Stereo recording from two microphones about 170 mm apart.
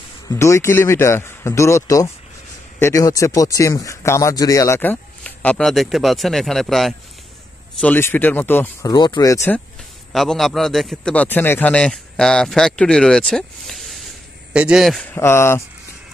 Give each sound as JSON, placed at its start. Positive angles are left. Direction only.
{"t": 0.3, "sound": "speech", "side_deg": 15}
{"t": 7.8, "sound": "speech", "side_deg": 10}
{"t": 8.9, "sound": "speech", "side_deg": 25}
{"t": 10.1, "sound": "a man's voice", "side_deg": 0}
{"t": 15.1, "sound": "speech", "side_deg": 15}